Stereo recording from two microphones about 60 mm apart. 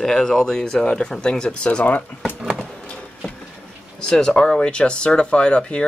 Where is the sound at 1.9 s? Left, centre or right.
Left.